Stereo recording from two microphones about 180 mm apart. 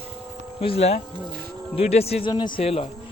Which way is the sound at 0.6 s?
35° left (ahead or behind).